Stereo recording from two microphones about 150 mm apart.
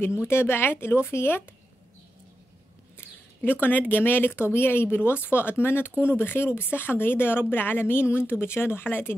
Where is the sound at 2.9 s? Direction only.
15° left (ahead or behind).